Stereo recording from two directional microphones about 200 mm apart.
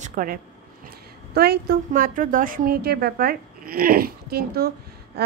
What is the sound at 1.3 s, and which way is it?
A woman's voice, 55° right (ahead or behind).